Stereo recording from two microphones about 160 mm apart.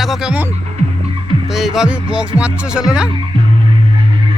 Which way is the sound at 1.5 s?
Centre (ahead or behind).